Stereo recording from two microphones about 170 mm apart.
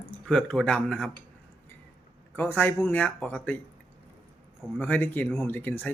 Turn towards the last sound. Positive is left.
turn(degrees=10)  # may be behind; listen again after turning